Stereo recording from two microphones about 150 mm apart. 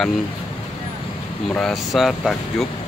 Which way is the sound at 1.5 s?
Centre (ahead or behind).